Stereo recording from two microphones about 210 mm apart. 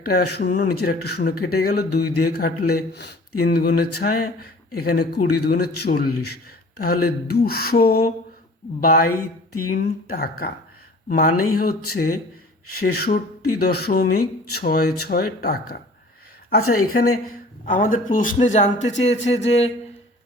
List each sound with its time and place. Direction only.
0.0 s speech: 45° left (ahead or behind)
6.1 s a man's voice: 90° left
6.3 s speech: 45° left (ahead or behind)
9.1 s a sound: 90° left
9.7 s a man's voice: 50° left (ahead or behind); by 19.7 s 30° left (ahead or behind)